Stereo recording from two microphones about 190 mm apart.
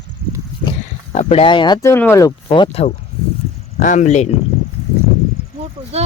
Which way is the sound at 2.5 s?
30° left (ahead or behind).